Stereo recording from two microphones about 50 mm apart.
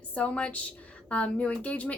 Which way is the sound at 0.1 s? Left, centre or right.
Left.